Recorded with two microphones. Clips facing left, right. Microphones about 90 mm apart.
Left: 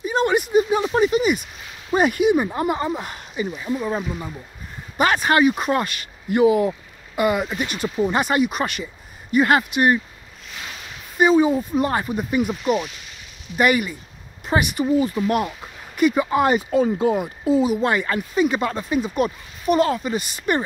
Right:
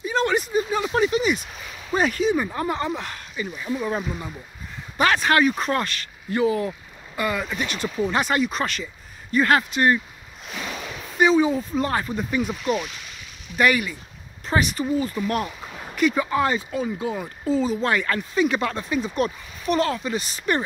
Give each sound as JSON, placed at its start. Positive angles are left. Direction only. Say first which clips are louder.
{"t": 0.0, "sound": "a sound", "louder": "left 3 dB", "side_deg": 15}
{"t": 1.9, "sound": "speech", "louder": "left 4 dB", "side_deg": 15}
{"t": 3.3, "sound": "speech", "louder": "left 5 dB", "side_deg": 25}
{"t": 3.6, "sound": "speech", "louder": "even", "side_deg": 10}
{"t": 11.1, "sound": "speech", "louder": "left 2 dB", "side_deg": 10}
{"t": 17.2, "sound": "speech", "louder": "left 4 dB", "side_deg": 10}
{"t": 20.2, "sound": "speech", "louder": "left 2 dB", "side_deg": 55}